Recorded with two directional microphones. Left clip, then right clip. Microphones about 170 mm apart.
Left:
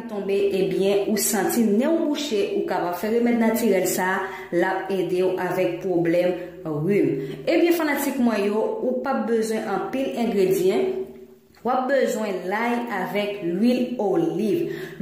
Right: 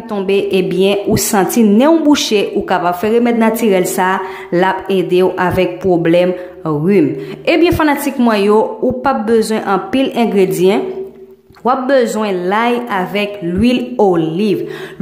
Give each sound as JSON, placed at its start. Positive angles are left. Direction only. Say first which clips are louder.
{"t": 0.3, "sound": "a woman's voice", "louder": "right 7 dB", "side_deg": -20}
{"t": 7.4, "sound": "a woman's voice", "louder": "right 9 dB", "side_deg": -25}